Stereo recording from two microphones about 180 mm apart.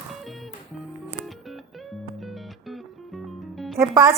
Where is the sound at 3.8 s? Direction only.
15° right (ahead or behind).